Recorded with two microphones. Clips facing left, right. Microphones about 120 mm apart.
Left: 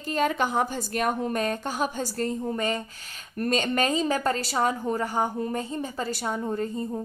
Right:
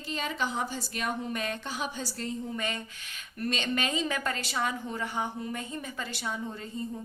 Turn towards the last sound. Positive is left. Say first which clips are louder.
# left 7 dB
turn(degrees=45)  # may be behind; listen again after turning